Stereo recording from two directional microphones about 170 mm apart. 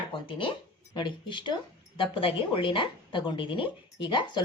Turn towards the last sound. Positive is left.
turn(degrees=25)  # may be behind; listen again after turning